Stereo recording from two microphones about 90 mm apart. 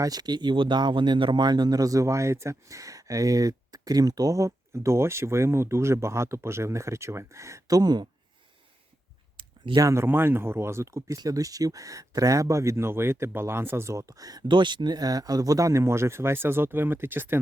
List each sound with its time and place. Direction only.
0.0 s speech: 45° right (ahead or behind)
9.4 s a sound: 65° right (ahead or behind)
9.8 s speech: 30° right (ahead or behind)
14.4 s speech: 60° right (ahead or behind); by 17.4 s 25° right (ahead or behind)